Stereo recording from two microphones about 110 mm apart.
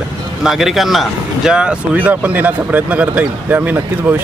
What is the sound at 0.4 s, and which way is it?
Speech, 5° right (ahead or behind).